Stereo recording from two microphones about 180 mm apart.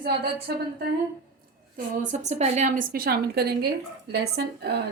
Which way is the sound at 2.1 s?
40° right (ahead or behind).